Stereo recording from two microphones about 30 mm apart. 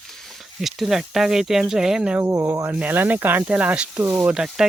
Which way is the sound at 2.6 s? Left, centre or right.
Right.